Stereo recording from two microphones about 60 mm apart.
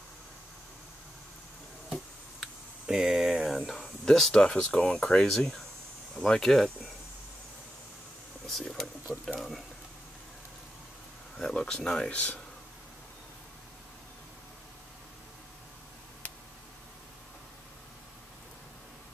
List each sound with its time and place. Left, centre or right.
2.9 s a sound: centre
4.0 s speech: centre
8.5 s speech: centre
9.1 s speech: centre
11.3 s speech: centre
12.1 s speech: left